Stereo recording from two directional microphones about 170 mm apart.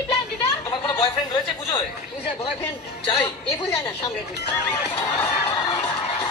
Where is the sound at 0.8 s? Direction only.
25° left (ahead or behind).